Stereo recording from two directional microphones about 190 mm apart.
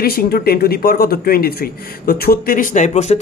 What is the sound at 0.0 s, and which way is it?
A man's voice, 55° left (ahead or behind).